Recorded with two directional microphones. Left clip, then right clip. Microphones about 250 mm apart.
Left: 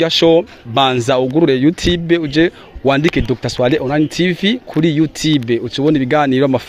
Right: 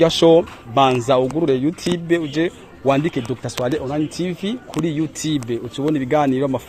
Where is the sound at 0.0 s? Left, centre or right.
Left.